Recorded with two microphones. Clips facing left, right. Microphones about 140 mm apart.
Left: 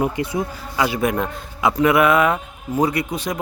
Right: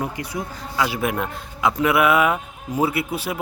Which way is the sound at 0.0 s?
25° left (ahead or behind).